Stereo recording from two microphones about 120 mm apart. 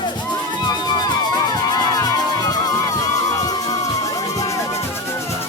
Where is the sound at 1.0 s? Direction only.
35° left (ahead or behind).